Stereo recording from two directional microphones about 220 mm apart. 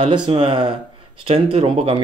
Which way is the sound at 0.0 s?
25° right (ahead or behind).